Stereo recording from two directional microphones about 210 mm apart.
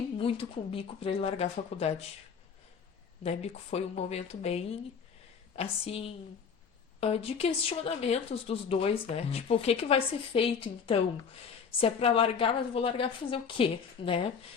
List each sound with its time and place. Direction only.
0.2 s speech: 25° left (ahead or behind)
3.2 s speech: 30° left (ahead or behind)